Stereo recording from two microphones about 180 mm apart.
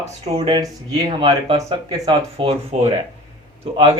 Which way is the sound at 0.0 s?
35° right (ahead or behind).